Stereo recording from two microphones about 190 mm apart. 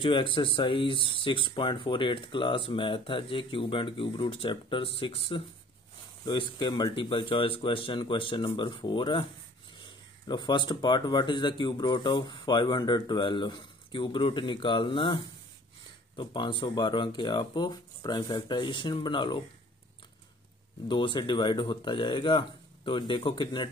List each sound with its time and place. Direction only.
0.0 s speech: 25° left (ahead or behind)
20.9 s speech: 25° left (ahead or behind)